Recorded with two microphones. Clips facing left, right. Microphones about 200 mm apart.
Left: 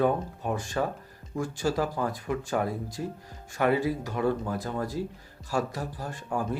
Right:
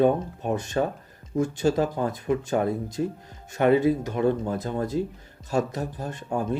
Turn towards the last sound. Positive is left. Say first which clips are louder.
# right 3 dB
turn(degrees=-20)  # may be behind; listen again after turning